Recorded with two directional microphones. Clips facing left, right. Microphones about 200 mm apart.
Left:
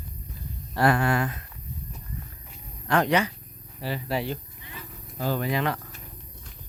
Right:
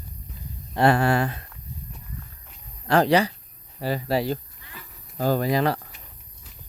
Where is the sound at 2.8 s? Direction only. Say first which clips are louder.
Right 4 dB; 35° right (ahead or behind).